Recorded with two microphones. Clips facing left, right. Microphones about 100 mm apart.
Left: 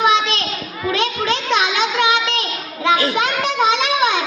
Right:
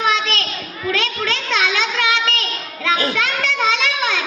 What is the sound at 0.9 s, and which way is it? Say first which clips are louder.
Music: left 3 dB; 20° left (ahead or behind).